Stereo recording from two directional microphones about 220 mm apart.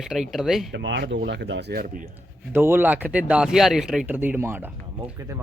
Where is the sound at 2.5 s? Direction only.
10° right (ahead or behind).